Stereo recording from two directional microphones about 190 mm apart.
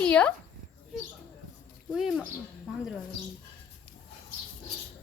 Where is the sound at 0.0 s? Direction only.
10° left (ahead or behind).